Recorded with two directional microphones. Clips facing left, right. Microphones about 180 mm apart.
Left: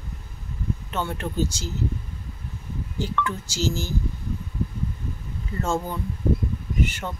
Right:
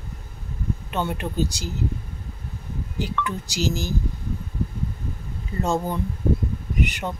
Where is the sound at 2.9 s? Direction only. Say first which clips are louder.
Even; 15° right (ahead or behind).